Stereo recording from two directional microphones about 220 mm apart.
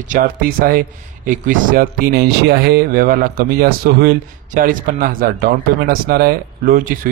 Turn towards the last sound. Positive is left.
turn(degrees=-40)  # may be behind; listen again after turning